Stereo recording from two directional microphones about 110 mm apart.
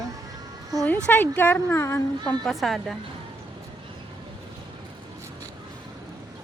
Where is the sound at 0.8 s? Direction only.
15° left (ahead or behind).